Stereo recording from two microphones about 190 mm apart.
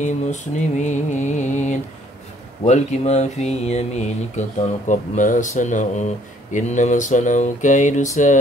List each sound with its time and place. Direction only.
0.0 s mantra: 40° left (ahead or behind)